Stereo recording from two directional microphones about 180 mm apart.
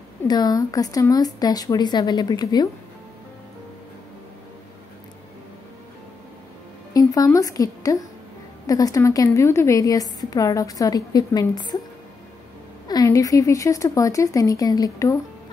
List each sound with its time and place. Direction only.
0.3 s a woman's voice: 20° left (ahead or behind)
6.9 s a woman's voice: 20° left (ahead or behind)
12.8 s a woman's voice: 20° left (ahead or behind)